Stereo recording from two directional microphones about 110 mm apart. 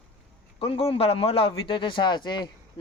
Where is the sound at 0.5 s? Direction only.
55° left (ahead or behind).